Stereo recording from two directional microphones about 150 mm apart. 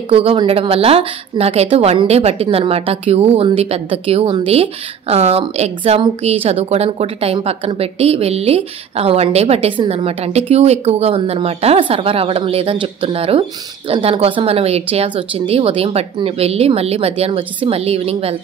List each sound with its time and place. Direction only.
0.1 s a woman's voice: 40° right (ahead or behind)